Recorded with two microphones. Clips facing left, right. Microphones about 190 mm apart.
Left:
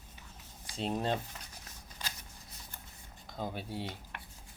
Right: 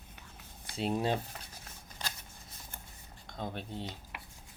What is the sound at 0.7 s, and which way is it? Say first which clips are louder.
Speech: right 2 dB; 5° right (ahead or behind).